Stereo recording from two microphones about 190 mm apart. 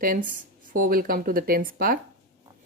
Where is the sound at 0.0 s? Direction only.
45° right (ahead or behind).